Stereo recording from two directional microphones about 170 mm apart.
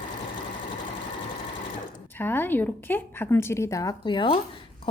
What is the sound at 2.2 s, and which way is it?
A woman's voice, 10° left (ahead or behind).